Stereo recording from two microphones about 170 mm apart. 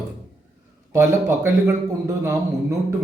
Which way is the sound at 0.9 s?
15° right (ahead or behind).